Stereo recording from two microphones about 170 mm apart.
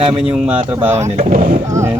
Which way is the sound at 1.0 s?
45° right (ahead or behind).